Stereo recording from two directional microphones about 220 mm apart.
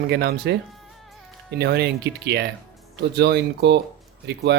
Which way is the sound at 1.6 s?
50° right (ahead or behind).